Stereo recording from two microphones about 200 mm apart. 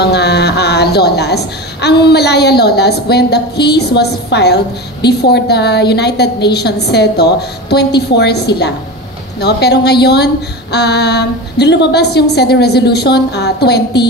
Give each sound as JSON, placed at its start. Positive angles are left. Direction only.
{"t": 0.0, "sound": "a woman's voice", "side_deg": 55}